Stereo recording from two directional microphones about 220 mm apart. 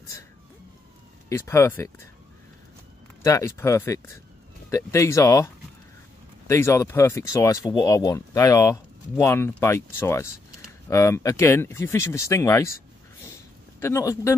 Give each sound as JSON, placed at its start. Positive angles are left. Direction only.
{"t": 1.3, "sound": "speech", "side_deg": 10}
{"t": 3.3, "sound": "speech", "side_deg": 15}
{"t": 13.7, "sound": "speech", "side_deg": 10}